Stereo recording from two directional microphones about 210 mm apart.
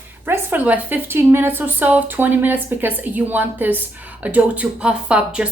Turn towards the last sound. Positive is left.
turn(degrees=-5)  # may be behind; listen again after turning